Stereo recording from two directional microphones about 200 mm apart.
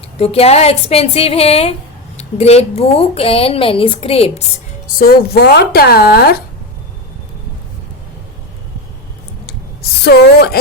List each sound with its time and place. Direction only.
0.2 s a woman's voice: 30° left (ahead or behind)
4.9 s a woman's voice: 50° left (ahead or behind)
10.0 s a woman's voice: 55° left (ahead or behind)